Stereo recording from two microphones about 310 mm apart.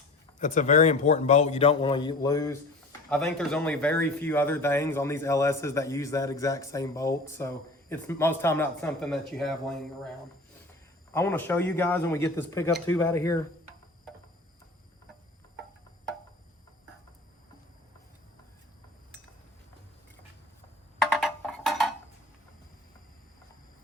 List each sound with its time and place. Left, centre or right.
0.3 s a man's voice: left; by 10.1 s centre
11.1 s speech: centre
21.0 s music: centre